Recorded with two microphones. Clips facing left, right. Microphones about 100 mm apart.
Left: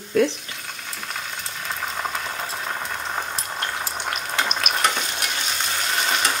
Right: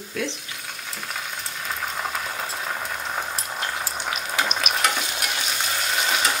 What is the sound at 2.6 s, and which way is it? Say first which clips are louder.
Frying: left 1 dB; centre (ahead or behind).